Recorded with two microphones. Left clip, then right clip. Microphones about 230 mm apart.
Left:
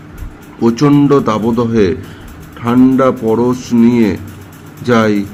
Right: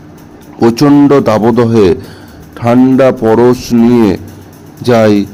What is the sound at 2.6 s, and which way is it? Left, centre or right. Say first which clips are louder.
A man's voice: right 4 dB; centre.